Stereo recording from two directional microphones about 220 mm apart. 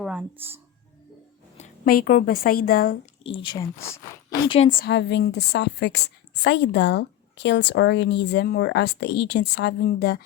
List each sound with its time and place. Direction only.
0.0 s speech: 5° right (ahead or behind)
1.5 s speech: 35° left (ahead or behind)
3.2 s speech: 25° left (ahead or behind)
4.4 s a woman's voice: 25° left (ahead or behind)
4.8 s a woman's voice: 50° left (ahead or behind)